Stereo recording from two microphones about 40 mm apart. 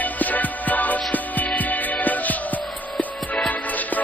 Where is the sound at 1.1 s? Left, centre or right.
Left.